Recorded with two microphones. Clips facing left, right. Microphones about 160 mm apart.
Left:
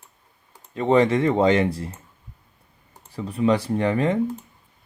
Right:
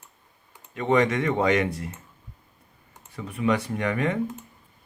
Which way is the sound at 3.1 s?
30° left (ahead or behind).